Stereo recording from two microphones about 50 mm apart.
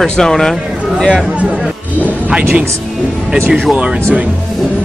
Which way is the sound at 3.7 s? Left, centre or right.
Right.